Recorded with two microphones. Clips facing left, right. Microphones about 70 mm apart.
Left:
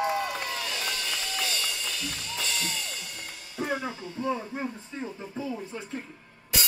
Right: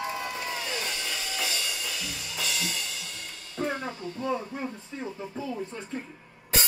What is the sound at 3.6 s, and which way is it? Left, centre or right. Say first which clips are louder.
Music: even; centre.